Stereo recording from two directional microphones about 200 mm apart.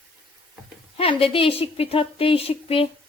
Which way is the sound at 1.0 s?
30° left (ahead or behind).